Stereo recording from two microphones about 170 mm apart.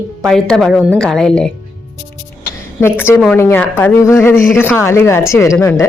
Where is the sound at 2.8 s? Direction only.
15° left (ahead or behind).